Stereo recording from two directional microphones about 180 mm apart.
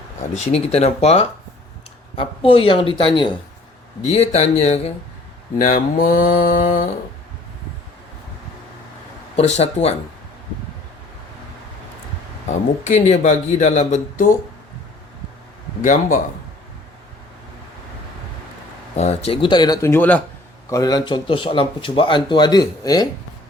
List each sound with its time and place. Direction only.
0.3 s speech: 35° left (ahead or behind)
4.1 s speech: 35° left (ahead or behind)
5.5 s mantra: 50° left (ahead or behind)
9.3 s speech: 35° left (ahead or behind)
12.5 s speech: 40° left (ahead or behind)
15.8 s mantra: 45° left (ahead or behind)
18.9 s speech: 35° left (ahead or behind); by 20.2 s 10° left (ahead or behind)
20.7 s speech: 20° left (ahead or behind)